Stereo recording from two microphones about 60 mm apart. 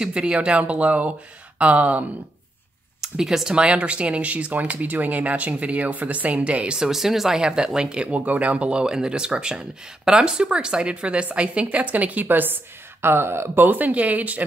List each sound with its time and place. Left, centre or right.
0.0 s speech: centre
3.0 s speech: centre
6.9 s speech: centre; by 13.7 s right
13.7 s speech: right